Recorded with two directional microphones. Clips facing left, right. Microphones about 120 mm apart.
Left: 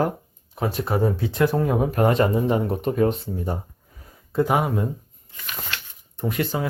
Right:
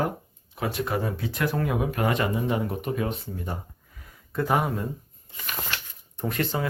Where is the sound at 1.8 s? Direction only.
40° left (ahead or behind).